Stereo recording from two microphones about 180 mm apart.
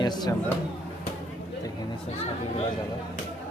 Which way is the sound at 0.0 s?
25° left (ahead or behind).